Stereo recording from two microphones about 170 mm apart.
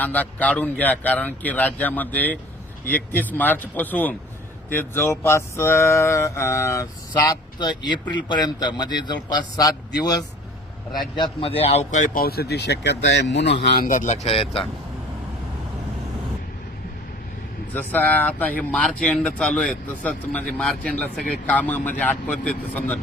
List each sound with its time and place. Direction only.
0.0 s a man's voice: 10° left (ahead or behind)
11.2 s speech: 35° left (ahead or behind)
11.9 s speech: 45° left (ahead or behind); by 13.8 s 85° left
13.8 s speech: 45° left (ahead or behind)
17.7 s speech: 10° left (ahead or behind)